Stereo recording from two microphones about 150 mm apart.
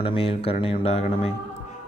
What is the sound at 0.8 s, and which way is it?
Speech, 45° left (ahead or behind).